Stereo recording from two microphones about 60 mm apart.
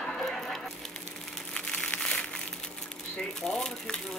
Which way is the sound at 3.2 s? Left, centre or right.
Centre.